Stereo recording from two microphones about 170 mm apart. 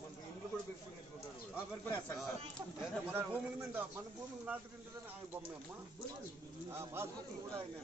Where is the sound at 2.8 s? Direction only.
10° right (ahead or behind).